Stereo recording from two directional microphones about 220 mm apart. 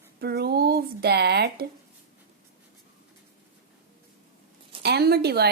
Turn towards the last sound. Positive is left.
turn(degrees=-45)  # may be behind; listen again after turning